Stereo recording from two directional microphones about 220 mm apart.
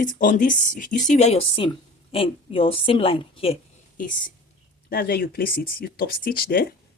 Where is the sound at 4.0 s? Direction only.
40° left (ahead or behind).